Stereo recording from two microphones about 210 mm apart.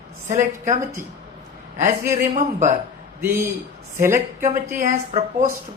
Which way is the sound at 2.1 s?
35° right (ahead or behind).